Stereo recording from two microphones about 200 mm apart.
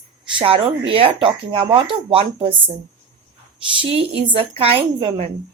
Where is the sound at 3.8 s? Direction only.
30° right (ahead or behind).